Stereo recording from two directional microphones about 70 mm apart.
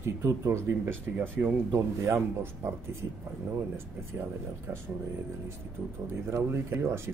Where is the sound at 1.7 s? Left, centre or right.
Right.